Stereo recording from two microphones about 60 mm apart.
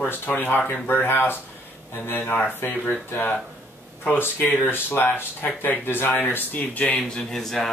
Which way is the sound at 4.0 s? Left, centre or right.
Left.